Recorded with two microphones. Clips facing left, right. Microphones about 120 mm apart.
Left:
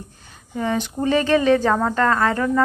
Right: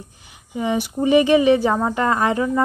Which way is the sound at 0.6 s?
10° right (ahead or behind).